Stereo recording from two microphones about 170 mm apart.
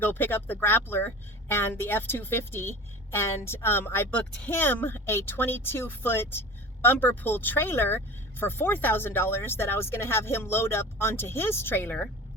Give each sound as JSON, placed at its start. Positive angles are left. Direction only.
{"t": 0.0, "sound": "a woman's voice", "side_deg": 10}